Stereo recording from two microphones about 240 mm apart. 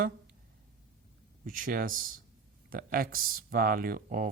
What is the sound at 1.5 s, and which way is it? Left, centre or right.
Speech, right.